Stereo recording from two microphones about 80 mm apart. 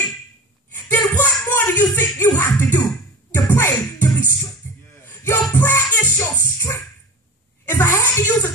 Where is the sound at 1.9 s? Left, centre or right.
Left.